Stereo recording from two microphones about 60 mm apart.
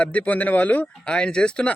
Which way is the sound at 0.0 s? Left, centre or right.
Left.